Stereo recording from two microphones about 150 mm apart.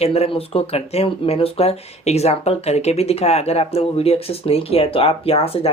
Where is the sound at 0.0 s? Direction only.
40° left (ahead or behind).